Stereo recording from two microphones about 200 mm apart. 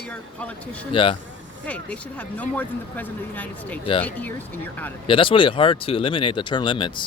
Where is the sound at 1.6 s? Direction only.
5° left (ahead or behind).